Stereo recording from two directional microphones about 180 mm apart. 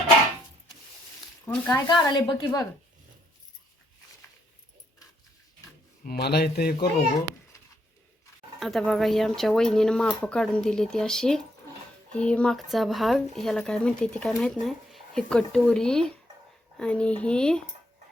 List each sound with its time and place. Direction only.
1.5 s speech: 10° left (ahead or behind)
1.9 s a woman's voice: 25° left (ahead or behind)
6.1 s a man's voice: 65° left (ahead or behind)
8.5 s speech: centre (ahead or behind)